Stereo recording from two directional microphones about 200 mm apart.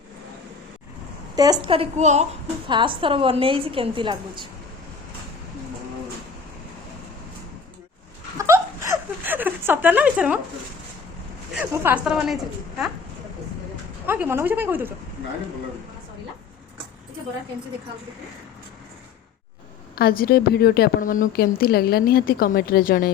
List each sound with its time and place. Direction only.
1.4 s a woman's voice: 20° right (ahead or behind)
8.4 s a sound: 15° right (ahead or behind)
11.5 s speech: 10° right (ahead or behind)
14.1 s speech: 10° right (ahead or behind)
20.0 s a woman's voice: 50° left (ahead or behind)